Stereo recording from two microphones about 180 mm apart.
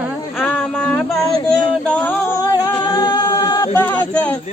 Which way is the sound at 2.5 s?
20° left (ahead or behind).